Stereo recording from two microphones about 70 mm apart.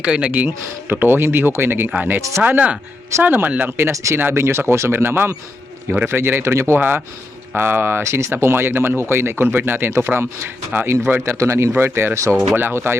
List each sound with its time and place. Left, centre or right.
0.0 s speech: centre; by 6.7 s right
6.7 s speech: right
8.0 s speech: right
11.3 s speech: right
12.5 s speech: right